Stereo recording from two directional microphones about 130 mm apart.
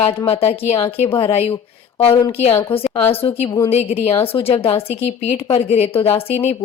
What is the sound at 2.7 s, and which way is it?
Speech, 45° left (ahead or behind).